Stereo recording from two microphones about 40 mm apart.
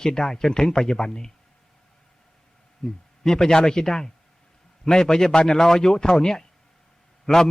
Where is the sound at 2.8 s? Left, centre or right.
Centre.